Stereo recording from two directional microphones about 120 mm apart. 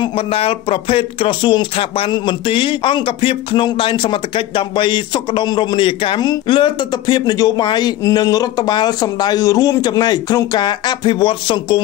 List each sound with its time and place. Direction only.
0.0 s speech: 50° left (ahead or behind)